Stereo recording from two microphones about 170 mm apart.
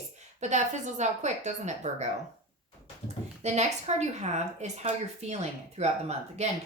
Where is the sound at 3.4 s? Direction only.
40° right (ahead or behind).